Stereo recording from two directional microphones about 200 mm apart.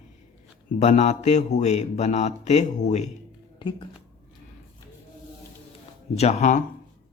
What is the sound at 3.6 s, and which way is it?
Speech, 25° left (ahead or behind).